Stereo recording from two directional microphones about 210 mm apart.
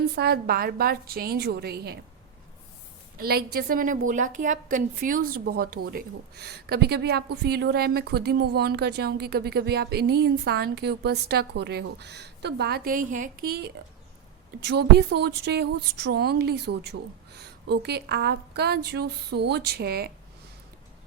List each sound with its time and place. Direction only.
0.2 s speech: 50° right (ahead or behind)
3.2 s speech: 45° right (ahead or behind)